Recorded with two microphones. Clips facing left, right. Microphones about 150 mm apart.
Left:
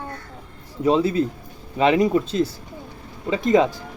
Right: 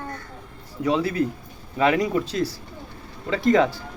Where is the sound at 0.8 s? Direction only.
25° left (ahead or behind).